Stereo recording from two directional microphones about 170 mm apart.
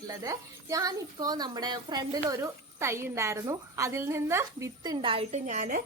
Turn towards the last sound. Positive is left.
turn(degrees=-50)  # may be behind; listen again after turning